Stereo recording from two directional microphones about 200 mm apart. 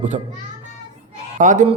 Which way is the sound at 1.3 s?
40° right (ahead or behind).